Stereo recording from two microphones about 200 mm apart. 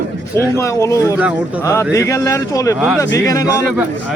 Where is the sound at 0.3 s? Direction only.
15° left (ahead or behind).